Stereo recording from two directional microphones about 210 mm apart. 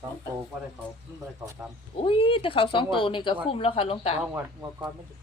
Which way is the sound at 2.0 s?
25° left (ahead or behind).